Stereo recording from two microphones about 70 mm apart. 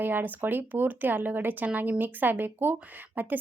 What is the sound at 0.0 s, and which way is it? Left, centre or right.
Speech, right.